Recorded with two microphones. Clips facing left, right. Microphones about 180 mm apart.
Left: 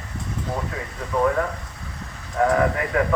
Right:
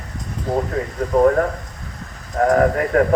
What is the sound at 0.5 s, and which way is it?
Speech, 45° right (ahead or behind).